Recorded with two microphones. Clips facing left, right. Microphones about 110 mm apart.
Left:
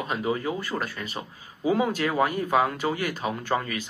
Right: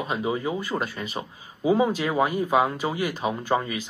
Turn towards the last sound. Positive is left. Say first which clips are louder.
# right 2 dB
turn(degrees=-15)  # may be behind; listen again after turning